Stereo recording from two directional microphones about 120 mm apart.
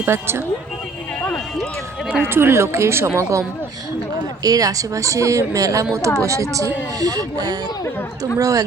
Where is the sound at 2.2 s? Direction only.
20° right (ahead or behind).